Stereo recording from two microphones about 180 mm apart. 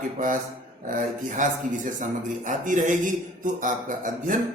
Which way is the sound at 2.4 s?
45° right (ahead or behind).